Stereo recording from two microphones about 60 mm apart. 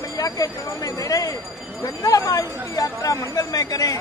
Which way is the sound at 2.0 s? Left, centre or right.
Left.